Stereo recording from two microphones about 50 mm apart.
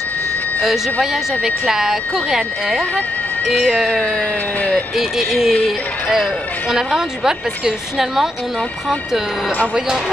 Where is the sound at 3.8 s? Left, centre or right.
Left.